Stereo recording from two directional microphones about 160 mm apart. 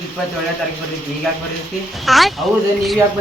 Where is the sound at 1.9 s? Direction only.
Centre (ahead or behind).